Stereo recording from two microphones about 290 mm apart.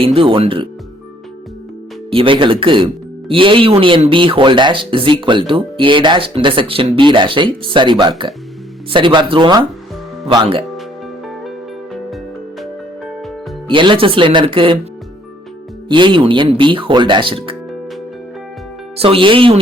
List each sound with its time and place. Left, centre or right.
0.0 s speech: centre
2.0 s speech: centre
13.7 s speech: centre
15.9 s speech: centre
18.9 s speech: centre